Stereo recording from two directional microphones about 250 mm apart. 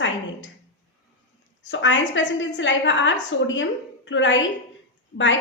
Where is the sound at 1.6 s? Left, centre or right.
Left.